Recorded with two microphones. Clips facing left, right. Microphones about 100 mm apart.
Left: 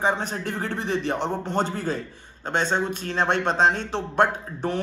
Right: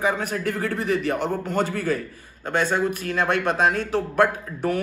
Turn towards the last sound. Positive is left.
turn(degrees=25)  # may be behind; listen again after turning